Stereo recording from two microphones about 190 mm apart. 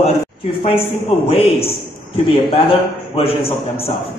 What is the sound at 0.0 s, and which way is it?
A man's voice, 30° left (ahead or behind).